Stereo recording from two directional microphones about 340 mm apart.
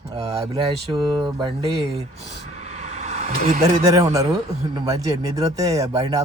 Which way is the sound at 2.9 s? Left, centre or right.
Centre.